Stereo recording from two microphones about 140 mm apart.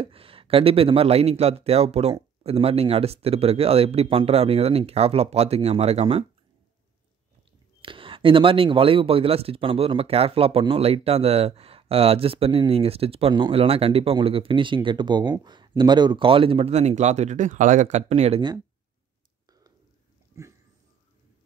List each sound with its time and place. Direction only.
0.0 s speech: 40° right (ahead or behind)
7.8 s speech: 40° right (ahead or behind)
20.4 s dog: 20° right (ahead or behind)